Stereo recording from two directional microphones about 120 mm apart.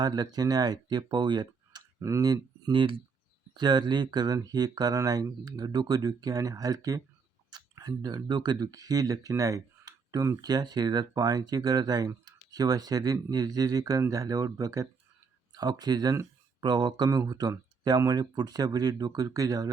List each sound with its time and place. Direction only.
0.0 s speech: 35° right (ahead or behind)